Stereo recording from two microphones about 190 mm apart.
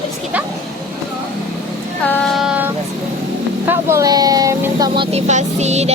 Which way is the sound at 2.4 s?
5° right (ahead or behind).